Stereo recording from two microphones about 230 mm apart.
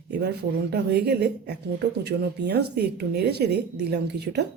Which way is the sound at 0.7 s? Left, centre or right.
Right.